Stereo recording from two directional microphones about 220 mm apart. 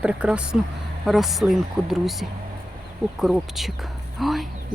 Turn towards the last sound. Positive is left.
turn(degrees=0)  # may be behind; listen again after turning